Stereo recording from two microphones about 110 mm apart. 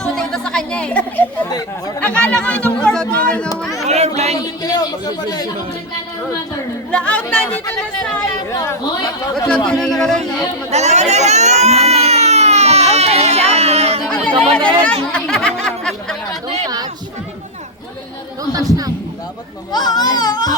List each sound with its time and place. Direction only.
0.0 s chatter: 5° left (ahead or behind)
2.0 s speech: 10° left (ahead or behind)
3.8 s speech: 90° right
4.6 s a man's voice: 35° left (ahead or behind)
6.9 s speech: 10° left (ahead or behind)
8.4 s a man's voice: 30° left (ahead or behind)
9.6 s speech: 5° left (ahead or behind)
10.7 s baby cry: 90° right; by 14.0 s 70° right (ahead or behind)
14.1 s speech: 10° left (ahead or behind)
15.1 s a sound: 5° left (ahead or behind)
16.6 s speech: 35° right (ahead or behind)
18.5 s a man's voice: 35° right (ahead or behind)
19.7 s a man's voice: 40° left (ahead or behind)